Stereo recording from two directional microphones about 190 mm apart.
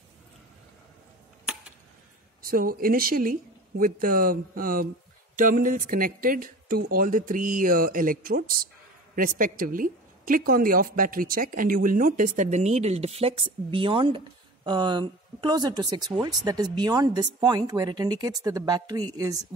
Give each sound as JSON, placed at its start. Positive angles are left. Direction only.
{"t": 2.4, "sound": "a woman's voice", "side_deg": -50}